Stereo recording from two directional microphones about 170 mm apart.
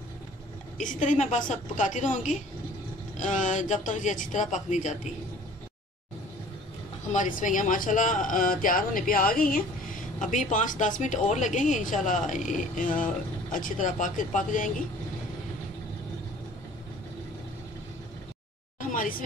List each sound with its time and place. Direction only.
0.7 s speech: 45° left (ahead or behind)
7.1 s speech: 50° left (ahead or behind)
18.8 s a sound: 55° left (ahead or behind)